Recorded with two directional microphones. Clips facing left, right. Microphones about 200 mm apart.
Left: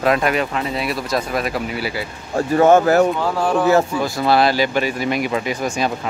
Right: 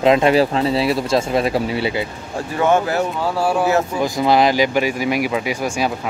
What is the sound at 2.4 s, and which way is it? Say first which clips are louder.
Speech: left 4 dB; 40° left (ahead or behind).